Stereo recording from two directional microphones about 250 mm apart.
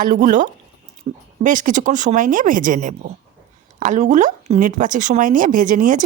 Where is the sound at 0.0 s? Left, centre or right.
Right.